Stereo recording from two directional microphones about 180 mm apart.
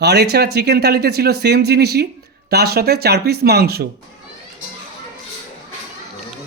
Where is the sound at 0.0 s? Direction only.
65° right (ahead or behind).